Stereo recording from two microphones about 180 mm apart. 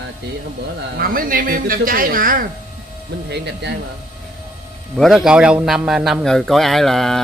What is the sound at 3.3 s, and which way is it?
Speech, 65° right (ahead or behind).